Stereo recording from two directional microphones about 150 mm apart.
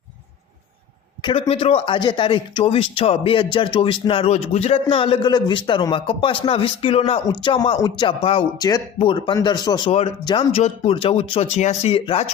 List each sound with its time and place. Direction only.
1.2 s speech: 35° left (ahead or behind)